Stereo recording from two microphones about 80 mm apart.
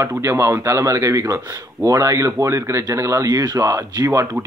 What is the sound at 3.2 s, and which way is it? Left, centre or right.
Speech, right.